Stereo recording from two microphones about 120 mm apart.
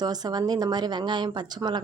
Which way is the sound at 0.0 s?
35° right (ahead or behind).